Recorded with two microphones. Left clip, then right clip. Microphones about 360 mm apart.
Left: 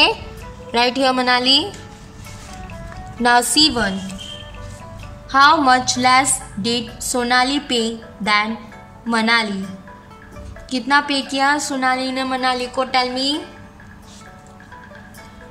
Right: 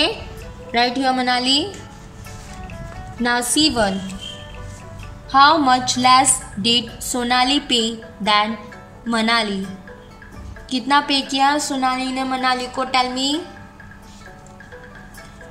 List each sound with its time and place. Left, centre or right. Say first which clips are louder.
0.7 s a woman's voice: left 2 dB; centre
2.7 s music: left 1 dB; centre
5.3 s a woman's voice: left 1 dB; centre